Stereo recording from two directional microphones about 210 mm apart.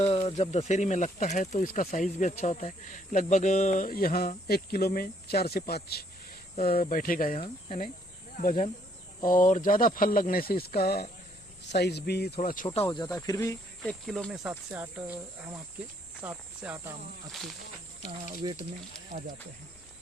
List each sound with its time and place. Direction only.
0.0 s speech: 25° left (ahead or behind); by 6.1 s 50° left (ahead or behind)
6.7 s speech: 40° left (ahead or behind)
7.3 s speech: 30° left (ahead or behind)
12.6 s speech: 25° left (ahead or behind)
14.1 s speech: centre (ahead or behind)
18.0 s speech: 30° left (ahead or behind)
18.4 s speech: 20° right (ahead or behind)